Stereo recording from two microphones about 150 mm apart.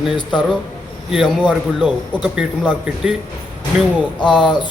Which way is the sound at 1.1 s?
5° right (ahead or behind).